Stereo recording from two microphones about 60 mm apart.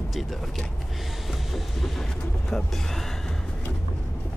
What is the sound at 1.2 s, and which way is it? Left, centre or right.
Vehicle, centre.